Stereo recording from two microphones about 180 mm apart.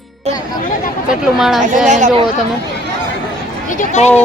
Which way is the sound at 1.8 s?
45° right (ahead or behind).